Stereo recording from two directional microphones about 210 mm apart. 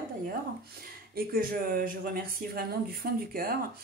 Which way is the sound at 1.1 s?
45° right (ahead or behind).